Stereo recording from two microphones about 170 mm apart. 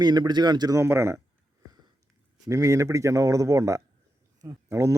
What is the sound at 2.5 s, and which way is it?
A man's voice, 15° right (ahead or behind).